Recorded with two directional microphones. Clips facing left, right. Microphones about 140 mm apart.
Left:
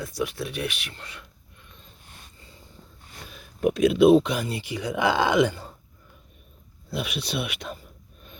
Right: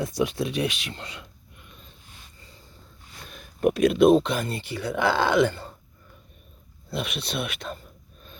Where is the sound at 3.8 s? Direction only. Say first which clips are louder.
Left 1 dB; centre (ahead or behind).